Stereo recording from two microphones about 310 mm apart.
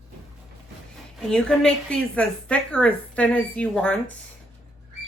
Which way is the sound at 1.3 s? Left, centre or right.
Centre.